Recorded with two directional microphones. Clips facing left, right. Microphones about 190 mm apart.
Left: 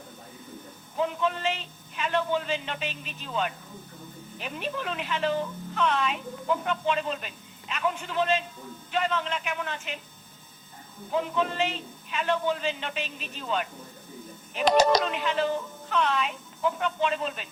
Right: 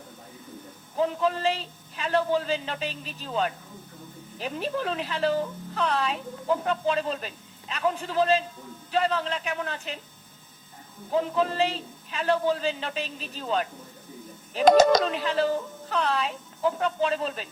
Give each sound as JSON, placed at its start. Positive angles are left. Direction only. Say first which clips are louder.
{"t": 0.9, "sound": "speech", "louder": "right 3 dB", "side_deg": -35}
{"t": 11.1, "sound": "speech", "louder": "right 2 dB", "side_deg": -35}
{"t": 14.5, "sound": "speech", "louder": "right 4 dB", "side_deg": -45}